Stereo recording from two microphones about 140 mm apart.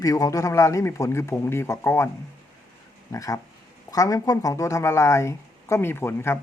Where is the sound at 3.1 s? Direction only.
25° left (ahead or behind).